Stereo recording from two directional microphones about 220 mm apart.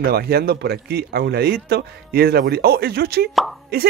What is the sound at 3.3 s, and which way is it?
Speech, centre (ahead or behind).